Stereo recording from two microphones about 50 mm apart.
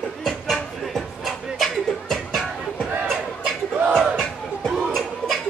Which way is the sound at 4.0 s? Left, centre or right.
Centre.